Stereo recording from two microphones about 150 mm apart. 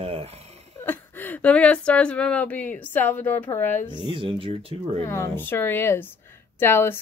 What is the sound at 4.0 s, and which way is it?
Speech, 35° right (ahead or behind).